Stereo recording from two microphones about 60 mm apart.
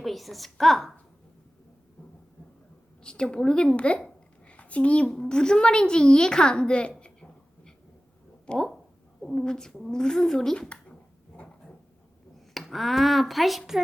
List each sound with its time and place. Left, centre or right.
0.0 s a woman's voice: centre
3.0 s a woman's voice: centre
4.4 s a sound: left
5.0 s a woman's voice: centre
7.0 s a sound: centre
8.4 s a woman's voice: centre
12.5 s speech: centre